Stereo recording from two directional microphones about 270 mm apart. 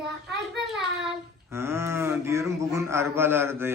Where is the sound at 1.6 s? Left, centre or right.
Centre.